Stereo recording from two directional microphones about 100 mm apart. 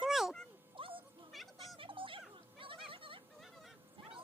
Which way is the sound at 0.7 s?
60° right (ahead or behind).